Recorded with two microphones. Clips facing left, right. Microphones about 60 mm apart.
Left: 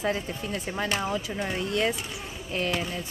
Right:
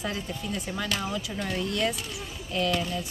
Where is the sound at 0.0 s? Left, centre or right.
Left.